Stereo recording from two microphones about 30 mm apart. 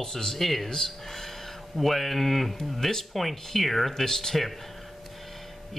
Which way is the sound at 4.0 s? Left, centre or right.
Centre.